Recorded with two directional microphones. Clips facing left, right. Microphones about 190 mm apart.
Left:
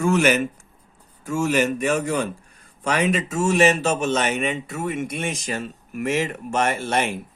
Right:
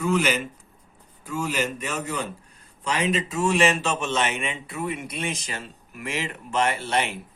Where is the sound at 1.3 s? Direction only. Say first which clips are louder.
Left 6 dB; 50° left (ahead or behind).